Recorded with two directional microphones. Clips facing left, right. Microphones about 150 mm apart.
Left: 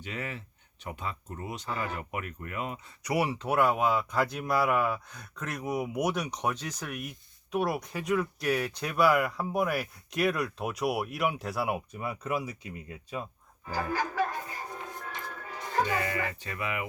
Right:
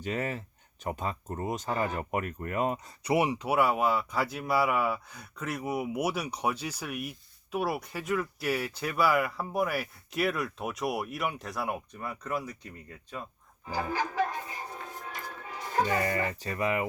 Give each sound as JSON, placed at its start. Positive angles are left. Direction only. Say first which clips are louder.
{"t": 0.0, "sound": "speech", "louder": "right 5 dB", "side_deg": -40}
{"t": 3.0, "sound": "speech", "louder": "right 2 dB", "side_deg": -25}
{"t": 13.7, "sound": "music", "louder": "even", "side_deg": -20}
{"t": 15.9, "sound": "speech", "louder": "right 2 dB", "side_deg": -30}